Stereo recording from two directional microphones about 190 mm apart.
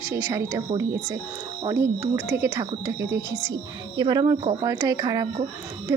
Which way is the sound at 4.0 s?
20° right (ahead or behind).